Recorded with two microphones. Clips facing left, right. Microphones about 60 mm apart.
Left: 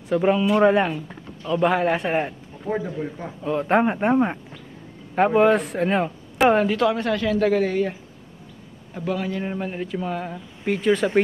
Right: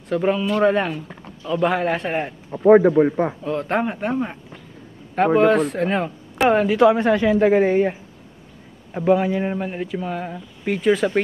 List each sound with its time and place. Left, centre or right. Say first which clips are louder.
0.1 s speech: left 1 dB; centre
2.6 s a man's voice: right 14 dB; right
3.4 s a man's voice: left 2 dB; centre
3.9 s speech: left 4 dB; left
5.1 s speech: right 1 dB; centre
6.8 s a man's voice: right 6 dB; right; by 11.1 s centre